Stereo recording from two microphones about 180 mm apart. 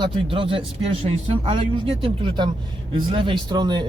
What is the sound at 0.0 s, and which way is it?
Speech, 30° right (ahead or behind).